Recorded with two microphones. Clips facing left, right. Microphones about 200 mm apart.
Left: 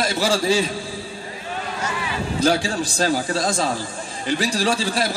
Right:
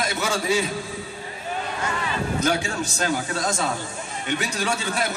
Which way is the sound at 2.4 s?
35° left (ahead or behind).